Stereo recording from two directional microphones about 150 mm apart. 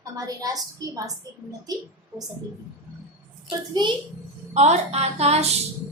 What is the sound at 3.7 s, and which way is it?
Speech, 30° right (ahead or behind).